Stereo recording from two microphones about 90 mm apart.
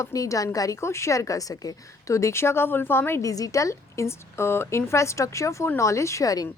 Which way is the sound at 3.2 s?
40° left (ahead or behind).